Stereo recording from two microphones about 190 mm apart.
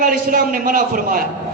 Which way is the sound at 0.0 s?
50° right (ahead or behind).